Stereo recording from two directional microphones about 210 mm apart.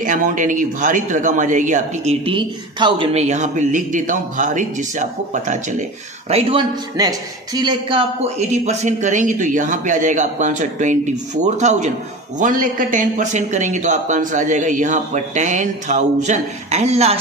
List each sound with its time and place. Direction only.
0.0 s speech: 40° right (ahead or behind)
2.2 s speech: 25° right (ahead or behind)
7.0 s speech: 20° right (ahead or behind)